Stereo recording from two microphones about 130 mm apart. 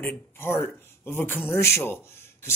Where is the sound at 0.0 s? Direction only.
15° left (ahead or behind).